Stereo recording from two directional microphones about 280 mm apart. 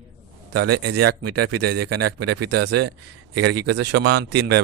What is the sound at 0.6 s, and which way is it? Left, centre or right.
Speech, right.